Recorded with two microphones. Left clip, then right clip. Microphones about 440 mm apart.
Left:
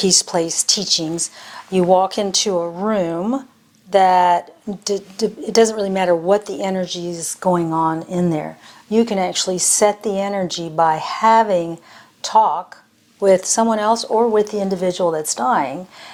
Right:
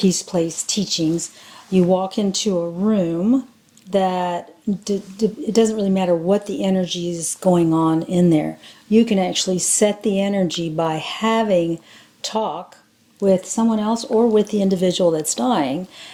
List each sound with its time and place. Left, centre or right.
0.0 s a woman's voice: left
13.2 s speech: left